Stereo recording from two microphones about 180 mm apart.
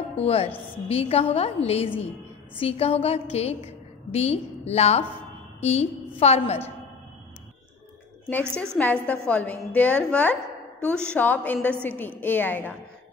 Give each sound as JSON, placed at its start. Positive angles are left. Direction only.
{"t": 0.1, "sound": "a woman's voice", "side_deg": 35}
{"t": 8.5, "sound": "a woman's voice", "side_deg": 5}